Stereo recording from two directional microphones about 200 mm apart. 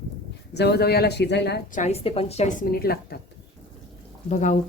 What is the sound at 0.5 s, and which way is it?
Speech, 55° left (ahead or behind).